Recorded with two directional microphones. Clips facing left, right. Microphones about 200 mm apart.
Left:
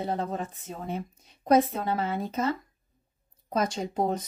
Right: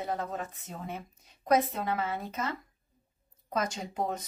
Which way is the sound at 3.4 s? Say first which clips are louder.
Left 5 dB; 30° left (ahead or behind).